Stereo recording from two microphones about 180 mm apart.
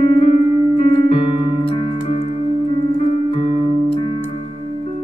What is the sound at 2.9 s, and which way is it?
Music, 35° left (ahead or behind).